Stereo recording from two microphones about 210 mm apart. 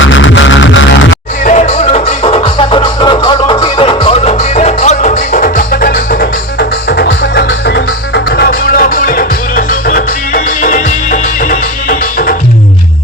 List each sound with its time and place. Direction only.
0.1 s music: 65° left (ahead or behind)
1.5 s music: 35° left (ahead or behind)